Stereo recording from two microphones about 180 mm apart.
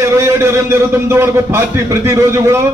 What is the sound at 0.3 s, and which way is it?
A man's voice, 15° right (ahead or behind).